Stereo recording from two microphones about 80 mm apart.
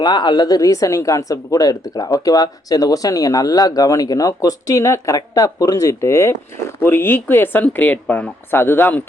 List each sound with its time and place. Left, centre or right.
0.0 s speech: left
6.7 s speech: left